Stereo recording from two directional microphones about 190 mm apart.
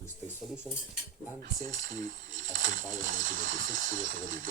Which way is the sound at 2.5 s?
90° right.